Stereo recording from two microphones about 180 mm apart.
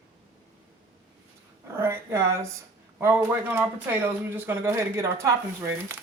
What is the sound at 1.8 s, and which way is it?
Speech, 15° right (ahead or behind).